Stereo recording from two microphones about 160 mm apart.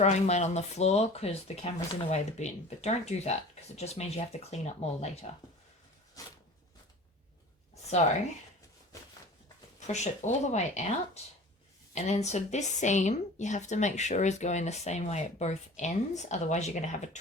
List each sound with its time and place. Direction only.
0.0 s speech: 45° left (ahead or behind)
6.2 s a sound: 20° left (ahead or behind)
9.8 s speech: 45° left (ahead or behind)